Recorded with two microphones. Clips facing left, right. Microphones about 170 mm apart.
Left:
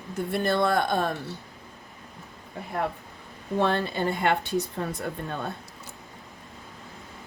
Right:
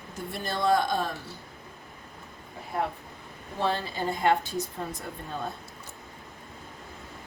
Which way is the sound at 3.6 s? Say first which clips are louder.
Left 3 dB; 60° left (ahead or behind).